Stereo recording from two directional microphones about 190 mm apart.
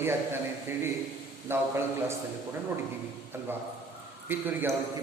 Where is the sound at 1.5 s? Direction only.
15° right (ahead or behind).